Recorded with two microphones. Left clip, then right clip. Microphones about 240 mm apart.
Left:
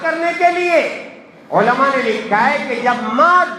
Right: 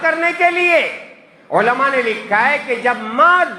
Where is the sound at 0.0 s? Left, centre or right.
Right.